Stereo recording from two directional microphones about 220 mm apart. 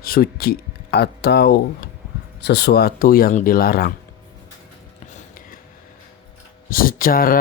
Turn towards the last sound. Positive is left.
turn(degrees=40)  # may be behind; listen again after turning